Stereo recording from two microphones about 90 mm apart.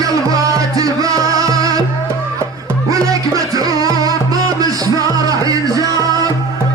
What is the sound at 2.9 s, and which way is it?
Music, 40° right (ahead or behind).